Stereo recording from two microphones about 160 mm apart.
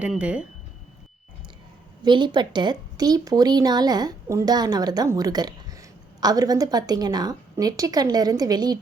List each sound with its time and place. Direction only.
0.0 s speech: 5° right (ahead or behind)
2.0 s a woman's voice: 30° right (ahead or behind)